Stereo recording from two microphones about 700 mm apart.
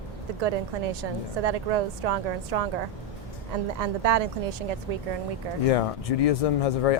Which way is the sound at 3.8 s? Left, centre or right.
Right.